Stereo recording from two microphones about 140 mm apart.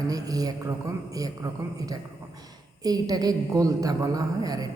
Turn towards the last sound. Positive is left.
turn(degrees=-25)  # may be behind; listen again after turning